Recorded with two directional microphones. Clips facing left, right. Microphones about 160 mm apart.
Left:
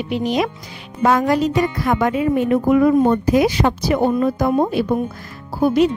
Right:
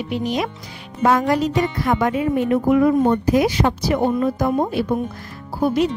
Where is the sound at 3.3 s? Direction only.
90° left.